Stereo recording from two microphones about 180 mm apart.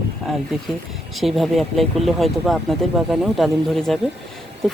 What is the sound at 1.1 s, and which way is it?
Speech, centre (ahead or behind).